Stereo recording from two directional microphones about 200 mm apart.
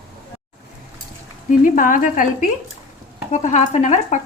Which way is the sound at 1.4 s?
40° left (ahead or behind).